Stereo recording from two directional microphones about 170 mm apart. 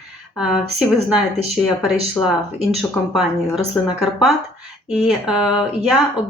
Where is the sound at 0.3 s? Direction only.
5° right (ahead or behind).